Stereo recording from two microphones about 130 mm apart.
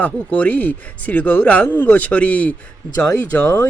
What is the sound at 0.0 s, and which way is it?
Speech, 10° left (ahead or behind).